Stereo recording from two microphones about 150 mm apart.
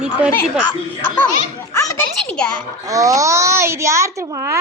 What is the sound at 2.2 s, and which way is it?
Speech, 5° left (ahead or behind).